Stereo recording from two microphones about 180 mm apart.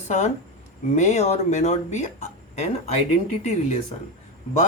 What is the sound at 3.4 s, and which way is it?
Speech, 35° left (ahead or behind).